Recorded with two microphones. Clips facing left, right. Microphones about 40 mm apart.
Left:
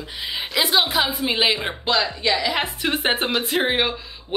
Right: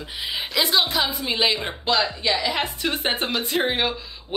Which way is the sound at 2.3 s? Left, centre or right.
Centre.